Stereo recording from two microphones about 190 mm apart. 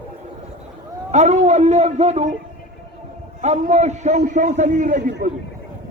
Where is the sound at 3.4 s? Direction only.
35° right (ahead or behind).